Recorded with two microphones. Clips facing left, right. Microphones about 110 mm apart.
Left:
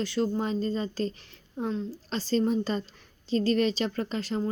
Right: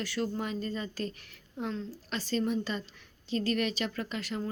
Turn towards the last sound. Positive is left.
turn(degrees=30)  # may be behind; listen again after turning